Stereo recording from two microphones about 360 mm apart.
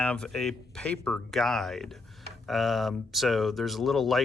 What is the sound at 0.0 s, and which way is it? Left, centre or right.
Speech, centre.